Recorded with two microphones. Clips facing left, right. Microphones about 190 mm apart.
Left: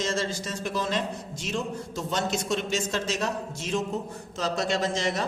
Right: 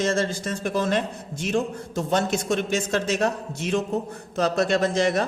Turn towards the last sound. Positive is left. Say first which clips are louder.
# right 6 dB
turn(degrees=-55)  # may be behind; listen again after turning